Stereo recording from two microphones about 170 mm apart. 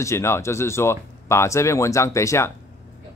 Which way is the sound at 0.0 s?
15° left (ahead or behind).